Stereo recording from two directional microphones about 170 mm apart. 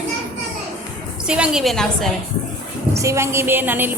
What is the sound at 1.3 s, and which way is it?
Speech, 5° right (ahead or behind).